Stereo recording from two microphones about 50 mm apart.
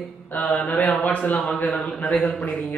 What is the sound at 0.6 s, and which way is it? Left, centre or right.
Speech, left.